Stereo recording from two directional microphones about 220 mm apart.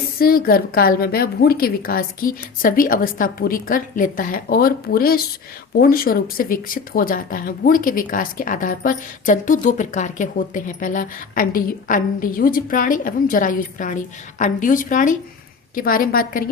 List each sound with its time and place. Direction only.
0.2 s speech: 40° left (ahead or behind)